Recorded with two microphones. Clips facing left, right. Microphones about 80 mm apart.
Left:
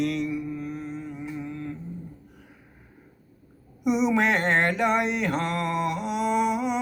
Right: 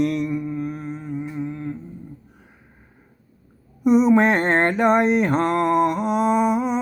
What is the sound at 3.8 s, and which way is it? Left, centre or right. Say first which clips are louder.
Mantra: right 7 dB; right.